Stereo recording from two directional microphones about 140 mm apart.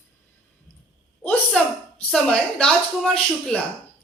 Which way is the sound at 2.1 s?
5° left (ahead or behind).